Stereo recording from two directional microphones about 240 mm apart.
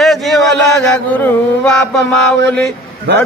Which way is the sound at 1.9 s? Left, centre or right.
Right.